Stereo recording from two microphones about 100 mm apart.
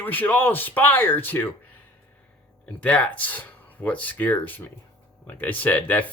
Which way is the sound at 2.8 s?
15° left (ahead or behind).